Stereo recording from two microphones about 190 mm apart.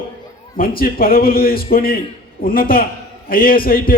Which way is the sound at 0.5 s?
50° left (ahead or behind).